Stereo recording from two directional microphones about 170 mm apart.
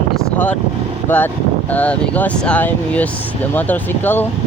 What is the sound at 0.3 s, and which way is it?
Speech, 10° left (ahead or behind).